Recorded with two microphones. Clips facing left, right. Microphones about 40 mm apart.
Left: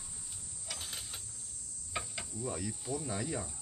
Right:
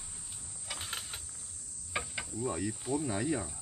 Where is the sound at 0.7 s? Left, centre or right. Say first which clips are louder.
Right 3 dB; centre.